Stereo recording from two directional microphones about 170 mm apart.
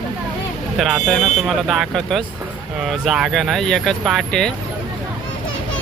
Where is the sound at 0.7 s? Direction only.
Centre (ahead or behind).